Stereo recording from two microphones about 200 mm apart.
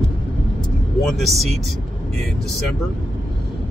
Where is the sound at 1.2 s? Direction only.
Centre (ahead or behind).